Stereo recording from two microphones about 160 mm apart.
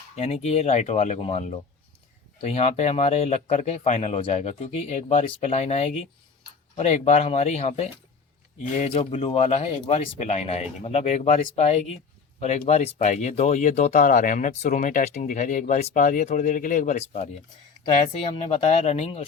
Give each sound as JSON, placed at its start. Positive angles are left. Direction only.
{"t": 0.2, "sound": "speech", "side_deg": 45}